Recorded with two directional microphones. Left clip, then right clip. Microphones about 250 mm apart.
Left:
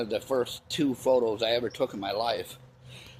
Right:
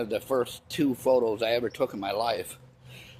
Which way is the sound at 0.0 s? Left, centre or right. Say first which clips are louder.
Right 1 dB; centre.